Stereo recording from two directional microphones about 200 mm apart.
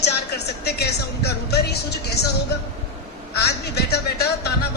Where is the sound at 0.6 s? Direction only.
55° left (ahead or behind).